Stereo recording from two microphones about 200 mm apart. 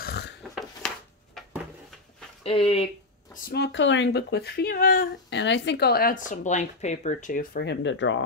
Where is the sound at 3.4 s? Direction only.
55° left (ahead or behind).